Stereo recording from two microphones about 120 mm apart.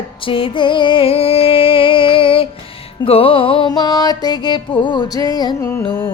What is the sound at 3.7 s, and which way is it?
Music, 35° left (ahead or behind).